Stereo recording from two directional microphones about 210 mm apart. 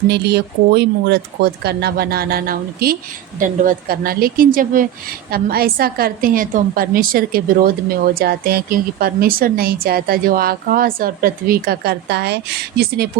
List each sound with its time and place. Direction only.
0.1 s a woman's voice: 50° right (ahead or behind)